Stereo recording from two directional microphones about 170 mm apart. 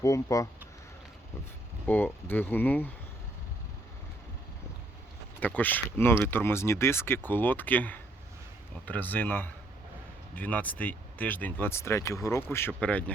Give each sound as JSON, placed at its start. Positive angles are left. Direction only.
{"t": 0.0, "sound": "speech", "side_deg": 20}
{"t": 1.9, "sound": "speech", "side_deg": 10}
{"t": 5.4, "sound": "speech", "side_deg": 10}